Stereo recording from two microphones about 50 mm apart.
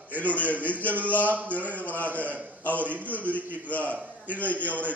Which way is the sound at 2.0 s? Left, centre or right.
Left.